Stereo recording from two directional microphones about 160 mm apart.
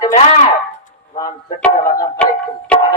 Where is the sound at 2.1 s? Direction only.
10° left (ahead or behind).